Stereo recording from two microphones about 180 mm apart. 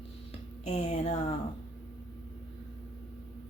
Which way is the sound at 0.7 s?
35° left (ahead or behind).